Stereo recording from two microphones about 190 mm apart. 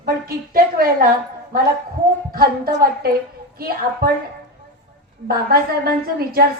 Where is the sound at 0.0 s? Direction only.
50° right (ahead or behind).